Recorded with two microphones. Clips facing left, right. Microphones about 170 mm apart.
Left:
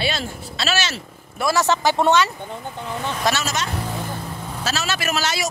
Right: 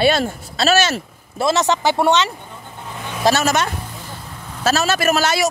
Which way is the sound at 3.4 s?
60° right (ahead or behind).